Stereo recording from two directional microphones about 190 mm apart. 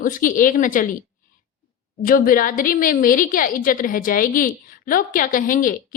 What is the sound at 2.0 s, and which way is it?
A woman's voice, 45° left (ahead or behind).